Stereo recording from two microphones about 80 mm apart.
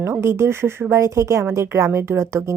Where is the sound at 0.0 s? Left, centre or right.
Right.